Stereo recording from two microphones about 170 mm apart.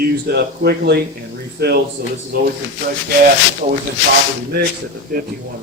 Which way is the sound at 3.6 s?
50° right (ahead or behind).